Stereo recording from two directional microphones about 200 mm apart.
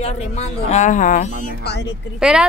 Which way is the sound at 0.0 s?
35° left (ahead or behind).